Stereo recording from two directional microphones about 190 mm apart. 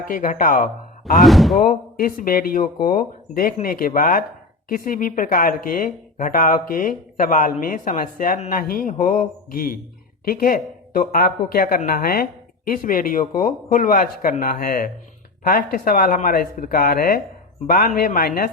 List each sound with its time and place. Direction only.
0.1 s speech: 45° left (ahead or behind)
1.2 s speech: centre (ahead or behind)
2.0 s speech: 50° left (ahead or behind)